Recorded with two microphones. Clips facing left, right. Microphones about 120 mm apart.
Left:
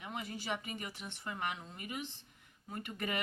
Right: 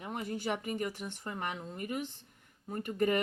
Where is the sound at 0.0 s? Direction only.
45° right (ahead or behind).